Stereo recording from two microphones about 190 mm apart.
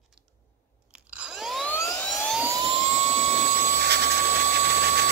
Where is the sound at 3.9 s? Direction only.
60° right (ahead or behind).